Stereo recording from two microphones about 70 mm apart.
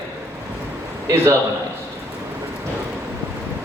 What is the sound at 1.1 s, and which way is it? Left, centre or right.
Speech, right.